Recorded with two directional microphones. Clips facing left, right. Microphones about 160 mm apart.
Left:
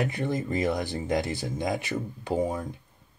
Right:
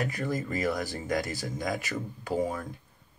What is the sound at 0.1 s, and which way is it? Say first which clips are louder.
Speech: left 3 dB; 25° left (ahead or behind).